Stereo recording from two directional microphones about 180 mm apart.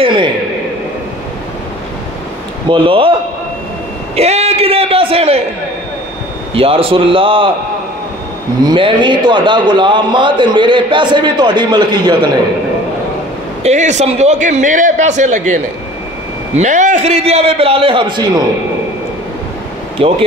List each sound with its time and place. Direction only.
0.0 s a sound: 25° right (ahead or behind)
2.7 s a man's voice: 30° right (ahead or behind)
4.1 s a sound: 35° right (ahead or behind)
6.5 s a man's voice: 30° right (ahead or behind)
8.6 s a man's voice: 25° right (ahead or behind)
13.6 s a man's voice: 40° right (ahead or behind)
20.0 s a man's voice: 35° right (ahead or behind)